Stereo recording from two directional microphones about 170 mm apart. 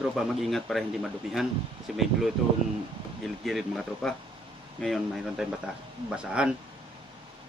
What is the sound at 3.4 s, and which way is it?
A man's voice, centre (ahead or behind).